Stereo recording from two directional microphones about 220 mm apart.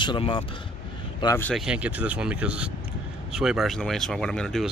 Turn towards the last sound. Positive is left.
turn(degrees=0)  # may be behind; listen again after turning